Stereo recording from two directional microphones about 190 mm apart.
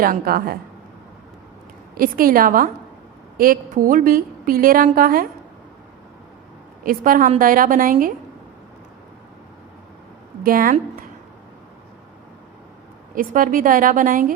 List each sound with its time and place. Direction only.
0.0 s a woman's voice: 50° right (ahead or behind)
2.0 s a woman's voice: 50° right (ahead or behind)
6.8 s a woman's voice: 45° right (ahead or behind)
10.4 s a woman's voice: 50° right (ahead or behind)
13.1 s a woman's voice: 45° right (ahead or behind)